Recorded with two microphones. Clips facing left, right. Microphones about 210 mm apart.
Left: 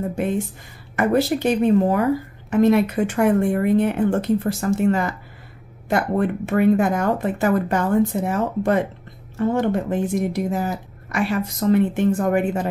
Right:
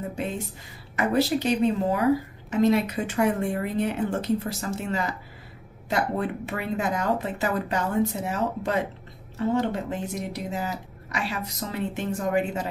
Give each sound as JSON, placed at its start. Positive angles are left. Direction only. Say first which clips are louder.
{"t": 0.9, "sound": "a woman's voice", "louder": "left 4 dB", "side_deg": 55}